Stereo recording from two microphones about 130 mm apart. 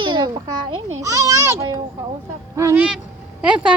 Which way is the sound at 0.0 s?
35° right (ahead or behind).